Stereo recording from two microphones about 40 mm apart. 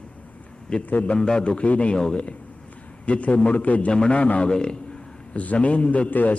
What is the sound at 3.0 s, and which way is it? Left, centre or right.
Speech, left.